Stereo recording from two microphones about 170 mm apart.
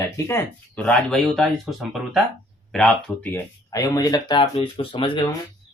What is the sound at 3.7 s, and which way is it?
Speech, 20° left (ahead or behind).